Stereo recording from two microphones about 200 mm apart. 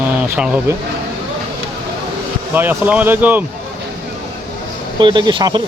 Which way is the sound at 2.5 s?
10° right (ahead or behind).